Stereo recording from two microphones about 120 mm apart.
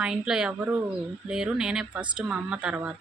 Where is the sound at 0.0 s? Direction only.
5° right (ahead or behind).